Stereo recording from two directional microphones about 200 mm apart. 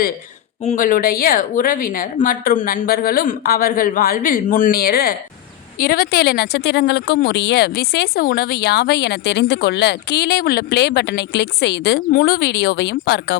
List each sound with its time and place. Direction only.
0.6 s a woman's voice: 40° left (ahead or behind); by 13.3 s 55° left (ahead or behind)